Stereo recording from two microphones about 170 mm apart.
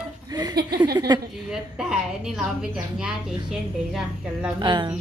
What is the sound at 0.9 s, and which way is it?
Speech, 25° right (ahead or behind).